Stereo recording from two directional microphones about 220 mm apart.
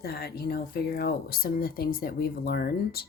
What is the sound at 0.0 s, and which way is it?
Speech, 45° left (ahead or behind).